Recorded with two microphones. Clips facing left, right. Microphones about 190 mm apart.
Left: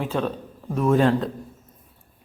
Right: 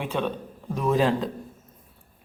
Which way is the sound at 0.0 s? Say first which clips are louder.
Left 2 dB; centre (ahead or behind).